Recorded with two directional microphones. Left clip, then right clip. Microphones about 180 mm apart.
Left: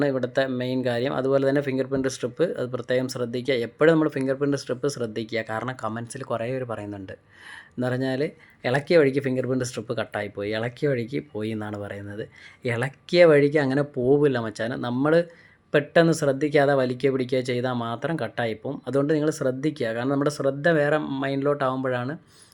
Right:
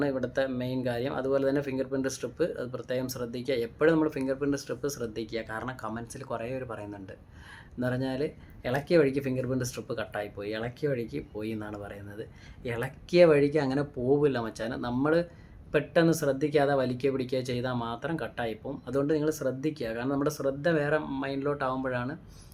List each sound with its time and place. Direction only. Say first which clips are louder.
0.0 s speech: left 5 dB; 30° left (ahead or behind)